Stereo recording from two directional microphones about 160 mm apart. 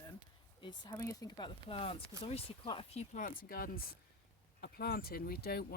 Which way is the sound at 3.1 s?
60° left (ahead or behind).